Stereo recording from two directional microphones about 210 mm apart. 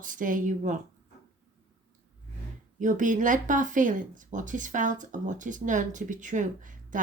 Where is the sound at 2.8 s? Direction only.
40° right (ahead or behind).